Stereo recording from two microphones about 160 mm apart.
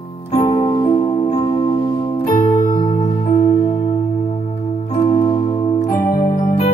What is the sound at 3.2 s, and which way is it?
Music, 55° left (ahead or behind).